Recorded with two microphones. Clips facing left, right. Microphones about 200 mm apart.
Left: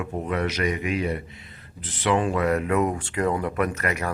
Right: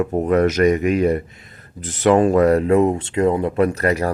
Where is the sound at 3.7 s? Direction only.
35° right (ahead or behind).